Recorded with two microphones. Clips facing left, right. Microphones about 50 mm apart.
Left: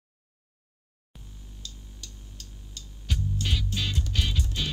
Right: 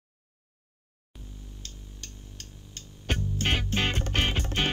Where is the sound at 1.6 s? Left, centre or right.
Right.